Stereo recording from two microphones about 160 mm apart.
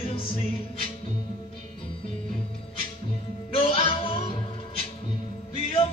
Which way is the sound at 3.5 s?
35° left (ahead or behind).